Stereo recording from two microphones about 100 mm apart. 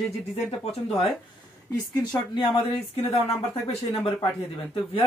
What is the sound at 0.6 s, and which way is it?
Speech, 70° left (ahead or behind).